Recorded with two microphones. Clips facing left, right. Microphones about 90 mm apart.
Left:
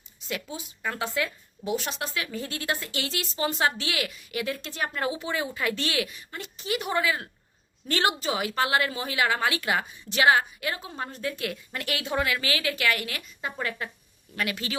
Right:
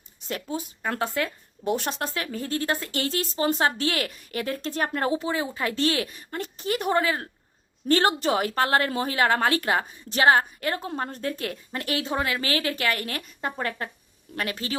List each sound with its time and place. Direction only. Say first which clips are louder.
0.3 s a woman's voice: right 4 dB; 40° right (ahead or behind)
5.3 s a woman's voice: right 1 dB; 30° right (ahead or behind)